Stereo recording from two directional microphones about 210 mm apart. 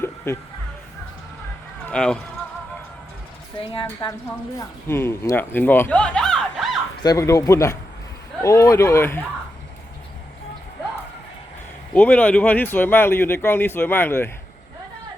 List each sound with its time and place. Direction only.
1.9 s speech: 5° left (ahead or behind)
3.6 s a woman's voice: 25° left (ahead or behind)
4.5 s speech: 10° left (ahead or behind)
7.0 s speech: 15° left (ahead or behind)
11.9 s speech: 5° left (ahead or behind)